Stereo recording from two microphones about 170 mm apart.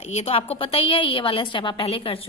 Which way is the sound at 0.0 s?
40° left (ahead or behind).